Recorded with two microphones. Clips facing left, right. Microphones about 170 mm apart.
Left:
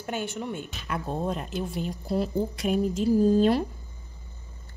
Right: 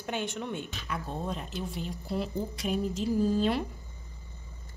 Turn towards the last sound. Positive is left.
turn(degrees=40)  # may be behind; listen again after turning